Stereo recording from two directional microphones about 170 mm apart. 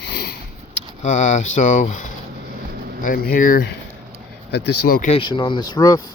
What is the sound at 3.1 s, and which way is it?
Speech, 55° left (ahead or behind).